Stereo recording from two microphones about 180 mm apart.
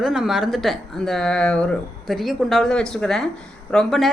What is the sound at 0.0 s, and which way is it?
Speech, centre (ahead or behind).